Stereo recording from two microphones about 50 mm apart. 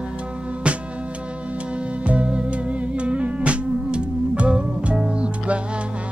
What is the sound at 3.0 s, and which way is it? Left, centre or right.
Music, right.